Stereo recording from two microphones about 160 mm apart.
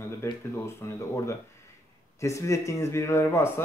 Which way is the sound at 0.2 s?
15° left (ahead or behind).